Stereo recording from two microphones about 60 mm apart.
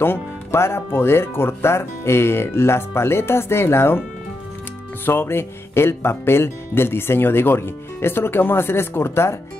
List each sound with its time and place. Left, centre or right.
0.0 s speech: left
5.0 s speech: left